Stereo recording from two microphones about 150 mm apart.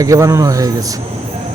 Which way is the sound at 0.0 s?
20° right (ahead or behind).